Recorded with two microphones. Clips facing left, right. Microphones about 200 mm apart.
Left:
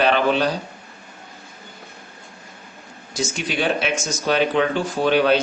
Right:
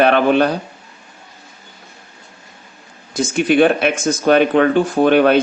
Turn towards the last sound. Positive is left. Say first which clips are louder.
# right 5 dB
turn(degrees=-55)  # may be behind; listen again after turning